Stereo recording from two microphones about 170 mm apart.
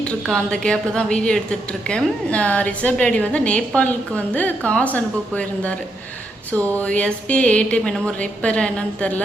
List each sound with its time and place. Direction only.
0.0 s a woman's voice: 5° left (ahead or behind)
6.7 s a woman's voice: 5° left (ahead or behind)